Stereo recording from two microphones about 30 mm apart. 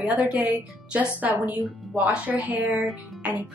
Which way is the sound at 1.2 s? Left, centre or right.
Right.